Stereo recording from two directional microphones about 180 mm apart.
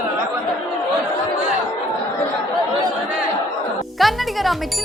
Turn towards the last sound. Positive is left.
turn(degrees=0)  # may be behind; listen again after turning